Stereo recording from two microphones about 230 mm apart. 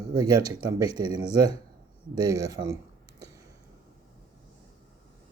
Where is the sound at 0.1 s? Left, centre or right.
Centre.